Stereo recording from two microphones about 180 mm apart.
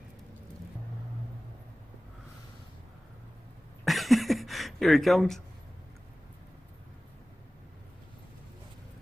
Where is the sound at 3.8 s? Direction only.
Centre (ahead or behind).